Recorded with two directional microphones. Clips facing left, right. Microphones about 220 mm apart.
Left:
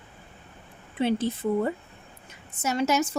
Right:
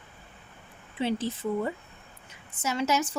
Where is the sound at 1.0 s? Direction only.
55° left (ahead or behind).